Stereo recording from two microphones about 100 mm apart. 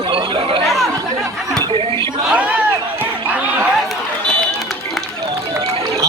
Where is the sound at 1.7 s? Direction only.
70° right (ahead or behind).